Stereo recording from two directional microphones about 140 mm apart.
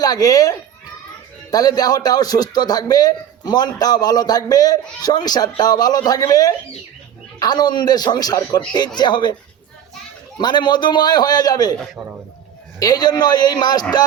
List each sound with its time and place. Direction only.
0.0 s a man's voice: 25° left (ahead or behind)
10.3 s a man's voice: 30° left (ahead or behind)
12.8 s a man's voice: 30° left (ahead or behind)